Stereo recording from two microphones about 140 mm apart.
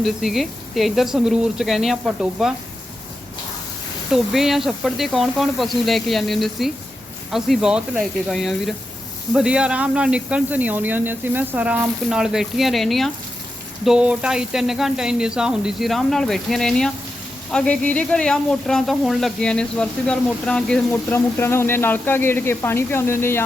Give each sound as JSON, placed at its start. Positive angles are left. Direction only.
{"t": 0.0, "sound": "speech", "side_deg": 0}
{"t": 4.1, "sound": "speech", "side_deg": 0}
{"t": 20.9, "sound": "speech", "side_deg": 15}